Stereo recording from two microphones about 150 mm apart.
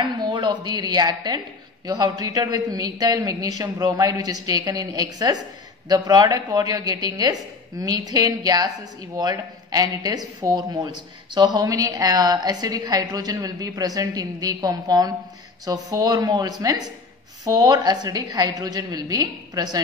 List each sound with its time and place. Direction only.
0.0 s a woman's voice: 30° right (ahead or behind)